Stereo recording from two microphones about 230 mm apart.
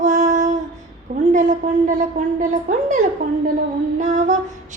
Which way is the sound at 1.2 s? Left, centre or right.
Right.